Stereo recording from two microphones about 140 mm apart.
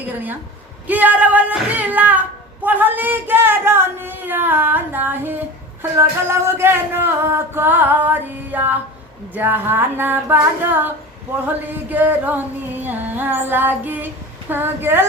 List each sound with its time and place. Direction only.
0.9 s speech: 10° right (ahead or behind)